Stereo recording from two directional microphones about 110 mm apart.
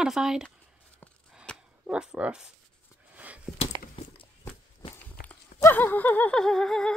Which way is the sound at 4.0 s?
55° left (ahead or behind).